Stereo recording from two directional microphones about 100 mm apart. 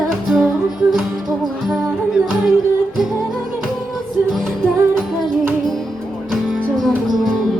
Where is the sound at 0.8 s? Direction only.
25° right (ahead or behind).